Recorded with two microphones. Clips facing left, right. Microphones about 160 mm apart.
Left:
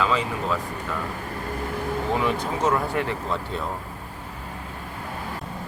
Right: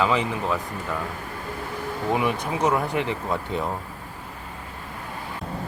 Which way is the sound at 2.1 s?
15° right (ahead or behind).